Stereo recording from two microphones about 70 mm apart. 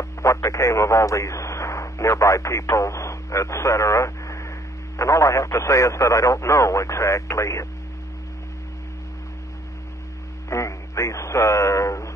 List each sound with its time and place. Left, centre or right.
0.0 s speech: left
10.5 s speech: left